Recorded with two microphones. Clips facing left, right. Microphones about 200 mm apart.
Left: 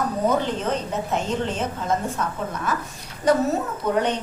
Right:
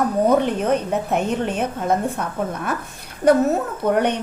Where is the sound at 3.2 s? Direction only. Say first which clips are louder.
Right 4 dB; 60° right (ahead or behind).